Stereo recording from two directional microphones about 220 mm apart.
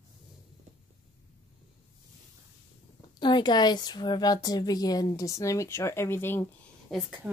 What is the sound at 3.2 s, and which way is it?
Speech, 20° left (ahead or behind).